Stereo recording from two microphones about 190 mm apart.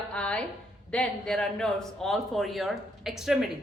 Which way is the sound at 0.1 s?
5° left (ahead or behind).